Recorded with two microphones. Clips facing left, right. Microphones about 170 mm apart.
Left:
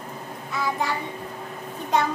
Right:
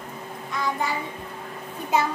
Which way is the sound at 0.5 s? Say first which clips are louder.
Left 1 dB; centre (ahead or behind).